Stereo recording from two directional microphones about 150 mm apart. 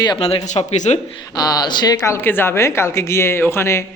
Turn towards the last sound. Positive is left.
turn(degrees=15)  # may be behind; listen again after turning